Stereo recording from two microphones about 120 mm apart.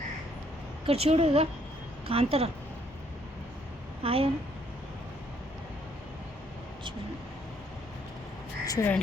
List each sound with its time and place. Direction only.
0.9 s speech: 55° right (ahead or behind)
4.0 s speech: 50° right (ahead or behind)
8.6 s speech: 30° left (ahead or behind)